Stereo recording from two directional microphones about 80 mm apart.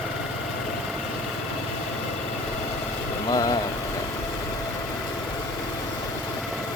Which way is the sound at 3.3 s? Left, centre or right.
Left.